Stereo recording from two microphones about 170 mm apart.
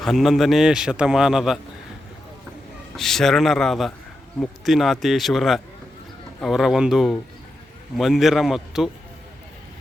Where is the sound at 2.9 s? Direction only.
Centre (ahead or behind).